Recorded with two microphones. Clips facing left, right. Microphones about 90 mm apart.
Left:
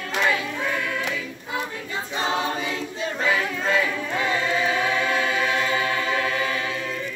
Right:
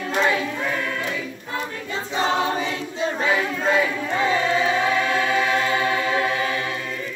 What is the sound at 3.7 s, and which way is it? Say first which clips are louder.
Choir: right 3 dB; 20° right (ahead or behind).